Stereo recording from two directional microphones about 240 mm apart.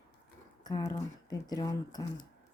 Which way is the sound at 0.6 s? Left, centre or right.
Centre.